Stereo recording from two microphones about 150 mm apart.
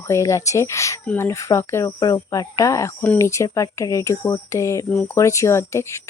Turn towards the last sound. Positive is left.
turn(degrees=20)  # may be behind; listen again after turning